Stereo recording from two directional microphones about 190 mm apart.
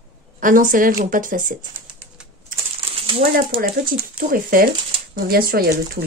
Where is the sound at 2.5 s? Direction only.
45° right (ahead or behind).